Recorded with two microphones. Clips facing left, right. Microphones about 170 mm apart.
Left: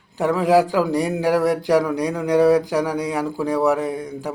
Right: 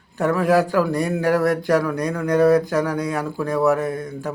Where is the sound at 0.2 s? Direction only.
15° left (ahead or behind).